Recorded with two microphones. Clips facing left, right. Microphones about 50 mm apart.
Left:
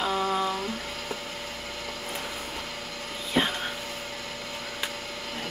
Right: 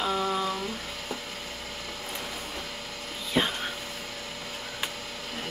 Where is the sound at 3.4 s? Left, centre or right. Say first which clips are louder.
Left 1 dB; centre.